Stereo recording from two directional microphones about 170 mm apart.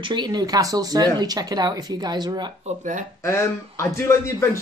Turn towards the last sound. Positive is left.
turn(degrees=15)  # may be behind; listen again after turning